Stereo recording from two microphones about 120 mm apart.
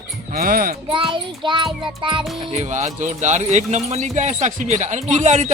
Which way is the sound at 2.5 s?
75° right (ahead or behind).